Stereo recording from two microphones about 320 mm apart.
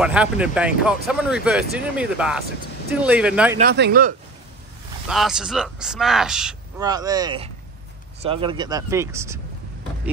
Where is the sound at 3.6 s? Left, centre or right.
Right.